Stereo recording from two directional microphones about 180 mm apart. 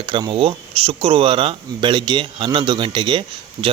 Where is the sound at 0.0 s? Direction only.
30° right (ahead or behind).